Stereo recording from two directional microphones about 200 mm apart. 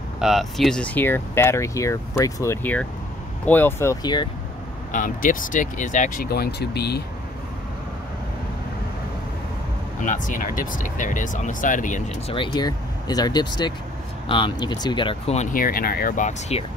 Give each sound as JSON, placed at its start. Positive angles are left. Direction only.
{"t": 0.2, "sound": "speech", "side_deg": 0}
{"t": 4.9, "sound": "speech", "side_deg": 40}
{"t": 10.0, "sound": "speech", "side_deg": 40}
{"t": 12.4, "sound": "speech", "side_deg": 20}
{"t": 15.5, "sound": "speech", "side_deg": 45}